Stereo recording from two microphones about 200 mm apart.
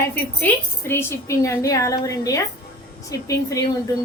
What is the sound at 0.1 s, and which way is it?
A woman's voice, 10° left (ahead or behind).